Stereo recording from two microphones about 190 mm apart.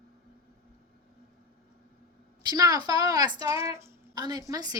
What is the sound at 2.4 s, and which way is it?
A woman's voice, 20° right (ahead or behind).